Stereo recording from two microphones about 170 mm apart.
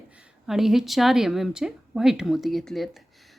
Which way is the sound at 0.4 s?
Centre (ahead or behind).